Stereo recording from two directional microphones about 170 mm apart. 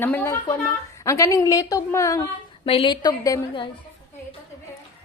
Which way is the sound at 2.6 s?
30° left (ahead or behind).